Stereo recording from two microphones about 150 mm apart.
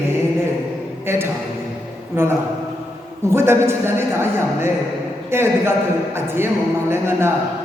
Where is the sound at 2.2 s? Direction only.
15° right (ahead or behind).